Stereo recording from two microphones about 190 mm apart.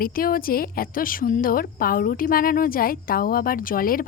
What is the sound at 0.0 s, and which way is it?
A woman's voice, 50° left (ahead or behind).